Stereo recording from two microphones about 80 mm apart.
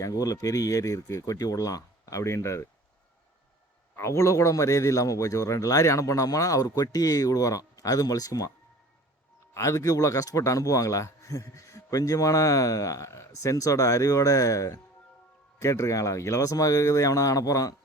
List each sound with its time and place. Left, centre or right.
0.0 s a man's voice: left
3.9 s a man's voice: left
9.6 s a man's voice: left